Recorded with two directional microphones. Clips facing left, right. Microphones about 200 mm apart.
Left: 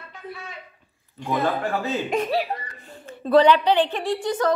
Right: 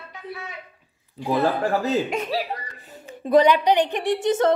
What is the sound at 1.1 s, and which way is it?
Speech, 35° right (ahead or behind).